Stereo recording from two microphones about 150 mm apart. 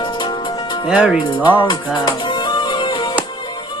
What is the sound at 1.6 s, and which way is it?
Music, 30° left (ahead or behind).